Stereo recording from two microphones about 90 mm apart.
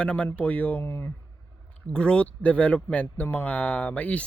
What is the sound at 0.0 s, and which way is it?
Speech, 15° left (ahead or behind).